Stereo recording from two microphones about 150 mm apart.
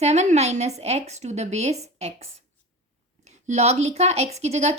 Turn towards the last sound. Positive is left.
turn(degrees=-45)  # may be behind; listen again after turning